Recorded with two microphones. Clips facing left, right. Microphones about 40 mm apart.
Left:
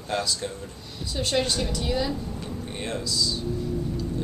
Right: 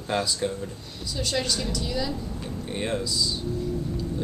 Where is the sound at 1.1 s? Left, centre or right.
Left.